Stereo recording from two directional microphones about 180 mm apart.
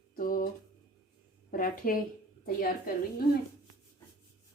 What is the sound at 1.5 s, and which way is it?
Speech, 50° left (ahead or behind).